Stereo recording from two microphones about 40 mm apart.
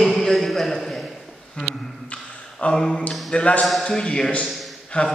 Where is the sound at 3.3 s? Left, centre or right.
Left.